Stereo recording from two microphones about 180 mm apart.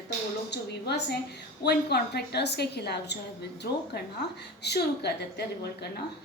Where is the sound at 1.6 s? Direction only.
65° left (ahead or behind).